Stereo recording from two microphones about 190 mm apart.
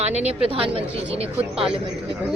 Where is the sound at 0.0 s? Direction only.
35° right (ahead or behind).